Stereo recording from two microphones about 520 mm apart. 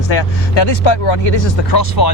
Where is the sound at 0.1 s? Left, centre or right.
Left.